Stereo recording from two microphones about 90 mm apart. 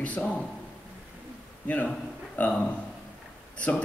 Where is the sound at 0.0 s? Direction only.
15° left (ahead or behind).